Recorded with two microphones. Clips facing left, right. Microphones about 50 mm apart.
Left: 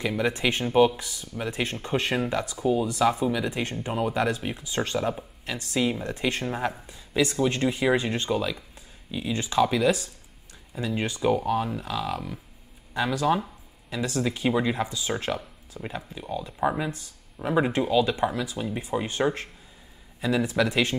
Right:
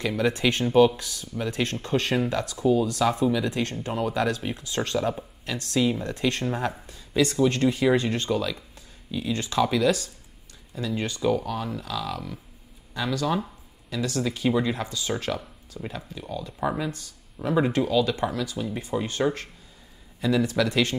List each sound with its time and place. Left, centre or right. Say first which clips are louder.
0.0 s speech: right 1 dB; centre